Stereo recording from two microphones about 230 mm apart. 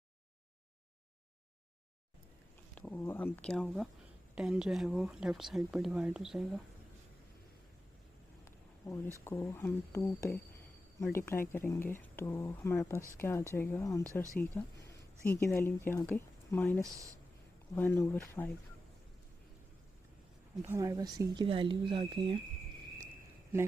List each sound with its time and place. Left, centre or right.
2.7 s speech: centre
8.5 s a sound: centre
9.2 s speech: centre
20.6 s speech: centre